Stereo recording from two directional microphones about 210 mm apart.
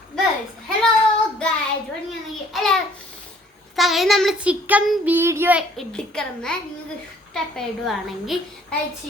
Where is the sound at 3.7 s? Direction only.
Centre (ahead or behind).